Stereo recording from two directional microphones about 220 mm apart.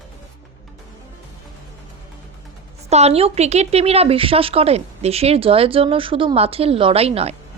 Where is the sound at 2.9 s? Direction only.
30° right (ahead or behind).